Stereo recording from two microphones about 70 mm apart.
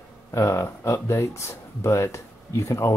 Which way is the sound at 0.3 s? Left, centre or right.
Left.